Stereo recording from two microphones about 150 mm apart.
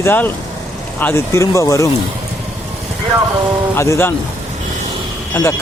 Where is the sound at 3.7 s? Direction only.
15° left (ahead or behind).